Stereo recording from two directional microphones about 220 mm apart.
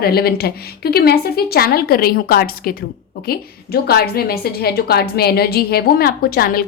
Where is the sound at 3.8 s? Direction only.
45° left (ahead or behind).